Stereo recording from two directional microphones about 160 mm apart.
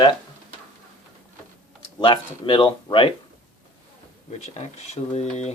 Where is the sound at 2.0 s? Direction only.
30° left (ahead or behind).